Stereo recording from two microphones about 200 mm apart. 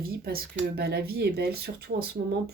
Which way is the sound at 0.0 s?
50° right (ahead or behind).